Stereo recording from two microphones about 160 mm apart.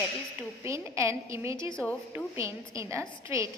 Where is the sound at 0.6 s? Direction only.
20° right (ahead or behind).